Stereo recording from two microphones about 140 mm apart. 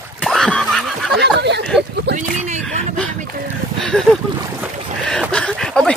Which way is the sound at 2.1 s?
60° right (ahead or behind).